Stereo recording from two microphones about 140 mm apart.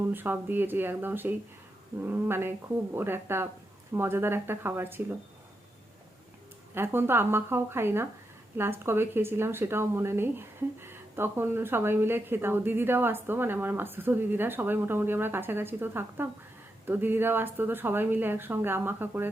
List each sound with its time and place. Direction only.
0.0 s speech: 15° right (ahead or behind)
6.7 s speech: 15° right (ahead or behind)